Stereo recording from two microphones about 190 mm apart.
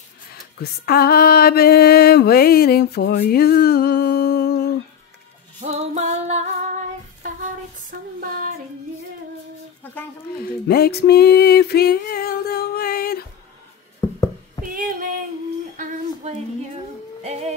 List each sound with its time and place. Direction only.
0.3 s music: 55° left (ahead or behind)
5.6 s music: 35° right (ahead or behind)
8.2 s child singing: 45° right (ahead or behind)
10.4 s music: 55° left (ahead or behind)
14.0 s a sound: 15° left (ahead or behind)
14.7 s a sound: 45° right (ahead or behind)
17.2 s music: 35° right (ahead or behind)